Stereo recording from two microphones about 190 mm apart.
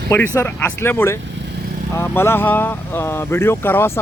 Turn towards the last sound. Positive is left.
turn(degrees=10)  # may be behind; listen again after turning